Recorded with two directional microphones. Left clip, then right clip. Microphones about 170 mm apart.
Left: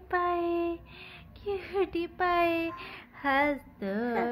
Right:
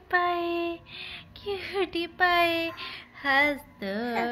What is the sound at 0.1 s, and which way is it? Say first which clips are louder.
Music: right 3 dB; centre (ahead or behind).